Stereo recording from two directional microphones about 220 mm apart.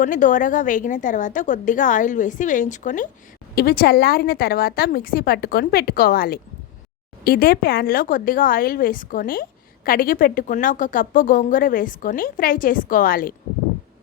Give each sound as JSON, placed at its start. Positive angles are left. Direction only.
{"t": 0.0, "sound": "a woman's voice", "side_deg": 35}